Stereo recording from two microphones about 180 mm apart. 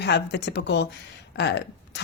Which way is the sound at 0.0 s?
70° left (ahead or behind).